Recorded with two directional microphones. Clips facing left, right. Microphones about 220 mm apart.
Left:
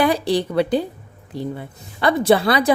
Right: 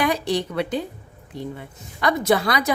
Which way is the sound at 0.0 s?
35° left (ahead or behind).